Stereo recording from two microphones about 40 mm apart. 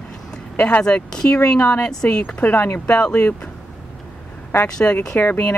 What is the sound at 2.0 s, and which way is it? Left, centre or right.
Speech, left.